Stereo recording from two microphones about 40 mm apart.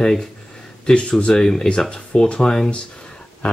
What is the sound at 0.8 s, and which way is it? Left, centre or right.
Speech, left.